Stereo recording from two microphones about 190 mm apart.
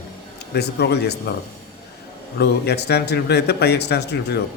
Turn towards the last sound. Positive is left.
turn(degrees=60)  # may be behind; listen again after turning